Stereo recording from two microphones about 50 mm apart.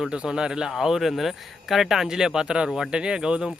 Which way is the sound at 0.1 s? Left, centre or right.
Centre.